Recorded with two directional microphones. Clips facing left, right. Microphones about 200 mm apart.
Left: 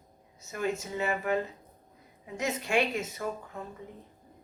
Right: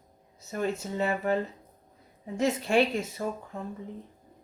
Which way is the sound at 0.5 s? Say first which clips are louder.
Right 2 dB; 35° right (ahead or behind).